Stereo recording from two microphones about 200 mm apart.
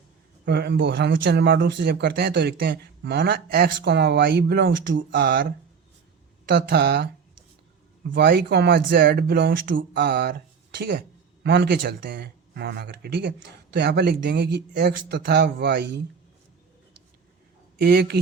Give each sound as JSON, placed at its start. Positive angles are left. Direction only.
{"t": 0.4, "sound": "speech", "side_deg": -55}
{"t": 8.1, "sound": "speech", "side_deg": -55}
{"t": 17.7, "sound": "speech", "side_deg": -55}